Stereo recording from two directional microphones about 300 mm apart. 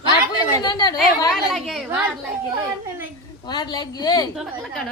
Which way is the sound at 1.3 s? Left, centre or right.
Centre.